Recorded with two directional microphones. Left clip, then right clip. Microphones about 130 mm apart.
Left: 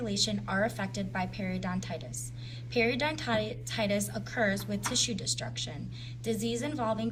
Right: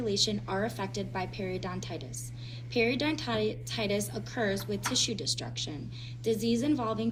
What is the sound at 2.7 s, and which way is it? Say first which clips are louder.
A woman's voice: even; 50° left (ahead or behind).